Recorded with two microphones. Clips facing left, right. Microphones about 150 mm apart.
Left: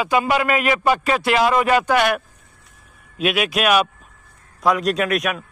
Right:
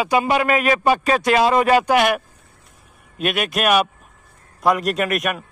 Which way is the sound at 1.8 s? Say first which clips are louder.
Right 1 dB; 5° right (ahead or behind).